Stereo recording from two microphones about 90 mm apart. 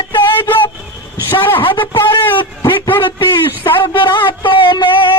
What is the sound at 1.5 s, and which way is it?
Speech, 65° left (ahead or behind).